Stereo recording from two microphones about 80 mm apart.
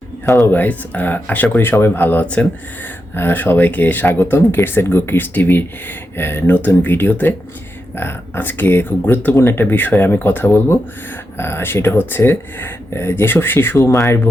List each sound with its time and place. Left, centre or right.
0.3 s speech: left
0.5 s speech: left
3.2 s speech: left
13.7 s speech: left